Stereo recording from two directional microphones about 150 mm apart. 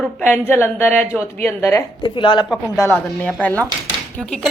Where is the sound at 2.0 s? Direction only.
30° left (ahead or behind).